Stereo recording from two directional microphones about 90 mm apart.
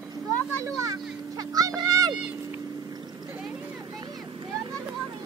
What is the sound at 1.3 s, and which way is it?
Music, 45° right (ahead or behind).